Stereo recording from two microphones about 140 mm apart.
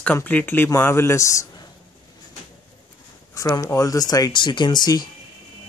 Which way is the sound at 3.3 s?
25° left (ahead or behind).